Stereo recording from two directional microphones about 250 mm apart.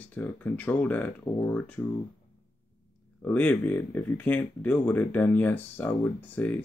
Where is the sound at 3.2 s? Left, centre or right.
Centre.